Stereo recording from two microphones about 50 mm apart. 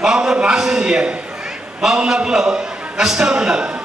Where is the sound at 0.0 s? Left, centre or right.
Centre.